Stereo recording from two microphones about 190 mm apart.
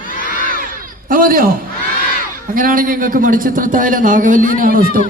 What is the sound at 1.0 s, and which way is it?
A man's voice, 50° right (ahead or behind).